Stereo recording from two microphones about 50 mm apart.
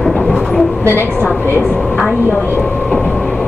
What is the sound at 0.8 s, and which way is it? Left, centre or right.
Speech, left.